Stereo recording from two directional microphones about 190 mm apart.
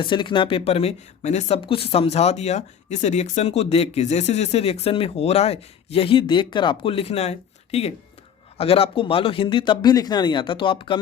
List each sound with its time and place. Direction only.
0.0 s speech: 25° left (ahead or behind)